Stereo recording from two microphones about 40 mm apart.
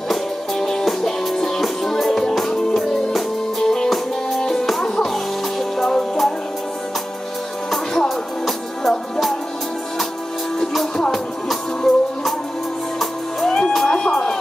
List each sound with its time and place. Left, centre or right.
0.1 s music: centre
8.5 s music: centre
10.6 s music: centre
13.8 s music: centre